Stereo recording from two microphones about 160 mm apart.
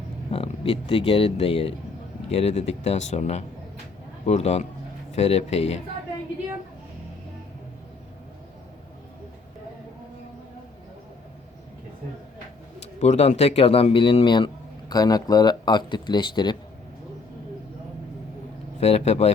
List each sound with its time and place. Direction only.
0.3 s speech: 35° left (ahead or behind)
12.8 s speech: 45° left (ahead or behind); by 16.6 s 25° left (ahead or behind)
18.8 s speech: 40° left (ahead or behind)